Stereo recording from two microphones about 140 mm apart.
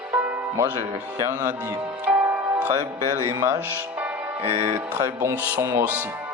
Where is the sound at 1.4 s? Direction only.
15° right (ahead or behind).